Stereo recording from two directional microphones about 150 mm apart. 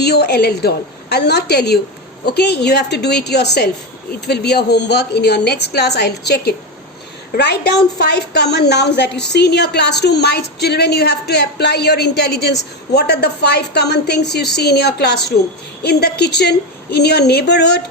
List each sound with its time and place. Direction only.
0.0 s a woman's voice: 90° left